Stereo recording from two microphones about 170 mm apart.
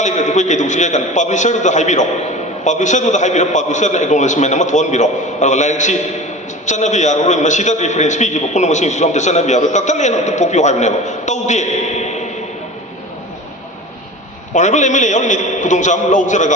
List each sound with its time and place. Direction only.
0.0 s a man's voice: 45° left (ahead or behind)
14.5 s a man's voice: 45° left (ahead or behind)